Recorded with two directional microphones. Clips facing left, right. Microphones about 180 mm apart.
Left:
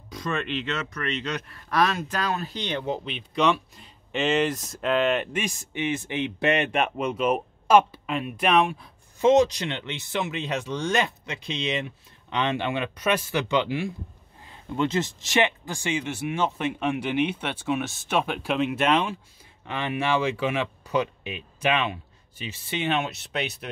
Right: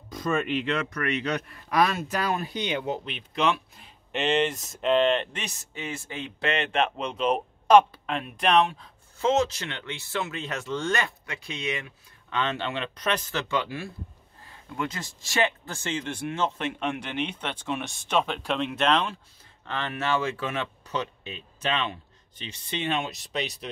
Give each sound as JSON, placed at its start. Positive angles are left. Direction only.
{"t": 0.1, "sound": "speech", "side_deg": -5}